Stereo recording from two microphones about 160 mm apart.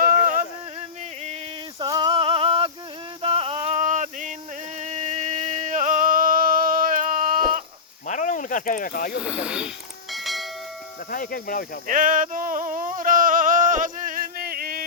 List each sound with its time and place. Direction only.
1.8 s a sound: 25° right (ahead or behind)
3.2 s music: 35° right (ahead or behind); by 7.6 s 60° right (ahead or behind)
8.0 s snake: 50° left (ahead or behind)
9.2 s speech: 5° right (ahead or behind)
10.1 s bell: centre (ahead or behind)
11.1 s speech: 60° left (ahead or behind)
11.9 s a sound: 60° right (ahead or behind)